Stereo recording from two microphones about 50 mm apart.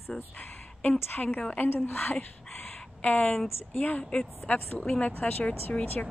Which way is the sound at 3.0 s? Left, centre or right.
Left.